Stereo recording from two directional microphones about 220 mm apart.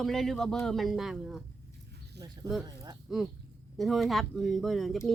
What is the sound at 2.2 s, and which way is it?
Speech, 15° right (ahead or behind).